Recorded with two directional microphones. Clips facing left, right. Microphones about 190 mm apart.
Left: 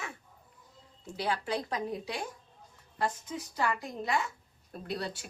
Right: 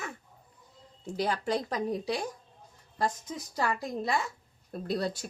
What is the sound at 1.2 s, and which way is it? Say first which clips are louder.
A woman's voice: right 3 dB; 40° right (ahead or behind).